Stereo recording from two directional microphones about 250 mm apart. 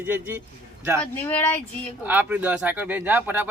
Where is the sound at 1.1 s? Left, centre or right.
Centre.